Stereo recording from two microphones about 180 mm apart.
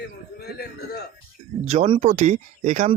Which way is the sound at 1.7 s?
35° right (ahead or behind).